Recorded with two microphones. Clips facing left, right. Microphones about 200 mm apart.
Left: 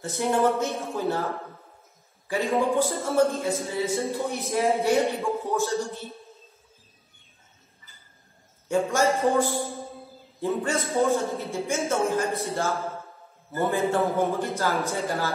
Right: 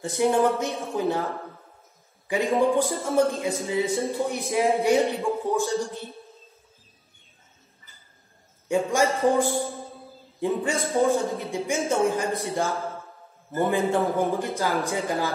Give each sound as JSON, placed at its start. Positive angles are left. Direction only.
{"t": 0.0, "sound": "a man's voice", "side_deg": -15}
{"t": 2.2, "sound": "a man's voice", "side_deg": -15}
{"t": 8.8, "sound": "a man's voice", "side_deg": -15}